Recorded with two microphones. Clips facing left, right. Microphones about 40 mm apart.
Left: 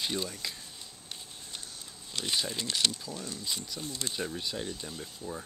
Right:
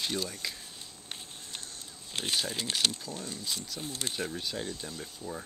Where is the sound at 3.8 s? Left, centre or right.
Centre.